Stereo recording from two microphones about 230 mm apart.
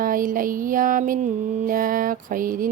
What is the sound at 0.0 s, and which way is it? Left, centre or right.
Mantra, right.